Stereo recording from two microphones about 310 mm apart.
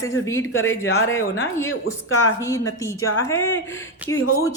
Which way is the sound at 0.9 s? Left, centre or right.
Left.